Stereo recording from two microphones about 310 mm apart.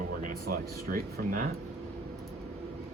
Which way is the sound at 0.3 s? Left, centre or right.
Right.